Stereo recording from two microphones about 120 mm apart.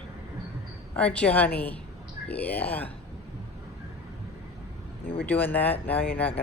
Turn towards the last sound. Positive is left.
turn(degrees=15)  # may be behind; listen again after turning